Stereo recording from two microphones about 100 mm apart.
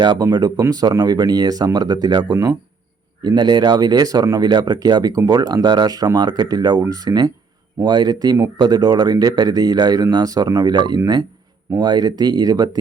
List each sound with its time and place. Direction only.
0.0 s speech: 45° right (ahead or behind)